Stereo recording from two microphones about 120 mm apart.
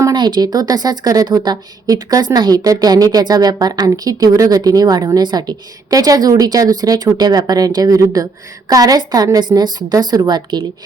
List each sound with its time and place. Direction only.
0.0 s a woman's voice: 35° right (ahead or behind)